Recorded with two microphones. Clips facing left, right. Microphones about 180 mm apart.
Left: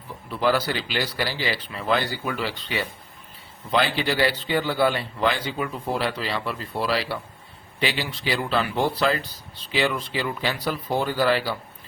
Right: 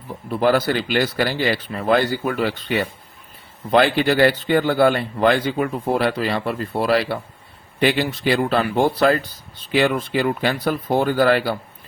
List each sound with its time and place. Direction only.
0.3 s speech: 50° right (ahead or behind)